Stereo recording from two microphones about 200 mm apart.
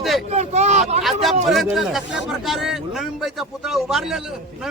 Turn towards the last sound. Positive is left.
turn(degrees=0)  # may be behind; listen again after turning